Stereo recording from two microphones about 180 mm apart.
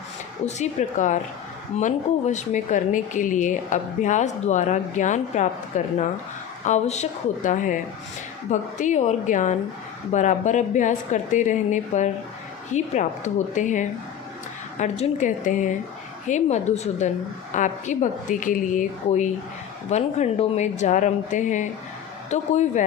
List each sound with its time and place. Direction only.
0.4 s speech: 40° left (ahead or behind)